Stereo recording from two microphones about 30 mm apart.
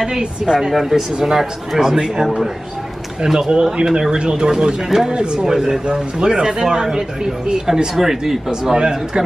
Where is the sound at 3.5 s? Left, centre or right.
Right.